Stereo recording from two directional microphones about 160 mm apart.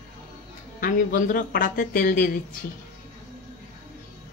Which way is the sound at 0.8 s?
60° left (ahead or behind).